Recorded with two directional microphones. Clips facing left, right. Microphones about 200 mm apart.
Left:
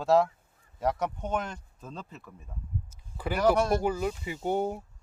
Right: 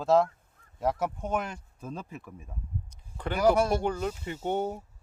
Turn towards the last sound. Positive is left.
turn(degrees=5)  # may be behind; listen again after turning